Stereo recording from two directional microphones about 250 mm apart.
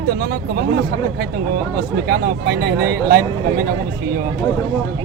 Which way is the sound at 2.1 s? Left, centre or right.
Right.